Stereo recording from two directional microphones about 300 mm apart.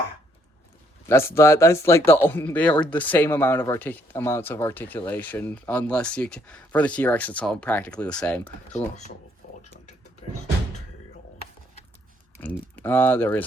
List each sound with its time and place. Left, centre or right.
1.0 s speech: centre
9.4 s a sound: left
12.4 s speech: centre